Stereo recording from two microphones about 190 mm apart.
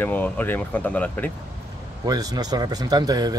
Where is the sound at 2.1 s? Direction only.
20° right (ahead or behind).